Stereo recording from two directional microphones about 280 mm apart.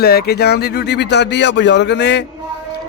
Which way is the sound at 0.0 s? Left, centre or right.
Left.